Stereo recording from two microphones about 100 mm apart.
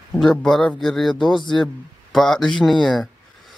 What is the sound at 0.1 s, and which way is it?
A man's voice, 10° left (ahead or behind).